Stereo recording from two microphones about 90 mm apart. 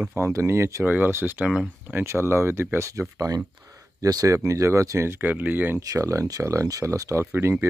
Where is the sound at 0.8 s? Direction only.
20° right (ahead or behind).